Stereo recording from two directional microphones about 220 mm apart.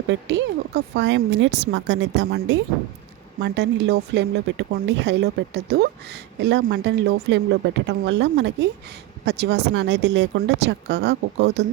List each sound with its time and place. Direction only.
0.1 s speech: 50° right (ahead or behind)